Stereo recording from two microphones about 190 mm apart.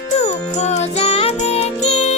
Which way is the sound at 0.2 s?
35° left (ahead or behind).